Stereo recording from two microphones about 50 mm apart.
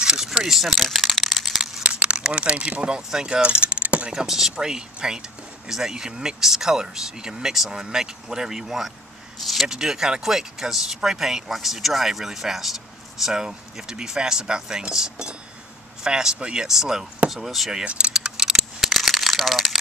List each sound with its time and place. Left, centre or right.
0.0 s speech: centre
0.7 s a sound: centre
1.8 s a sound: right
3.1 s speech: centre
3.4 s vehicle: right
4.1 s speech: centre
17.8 s keys jangling: right
18.9 s crumpling: centre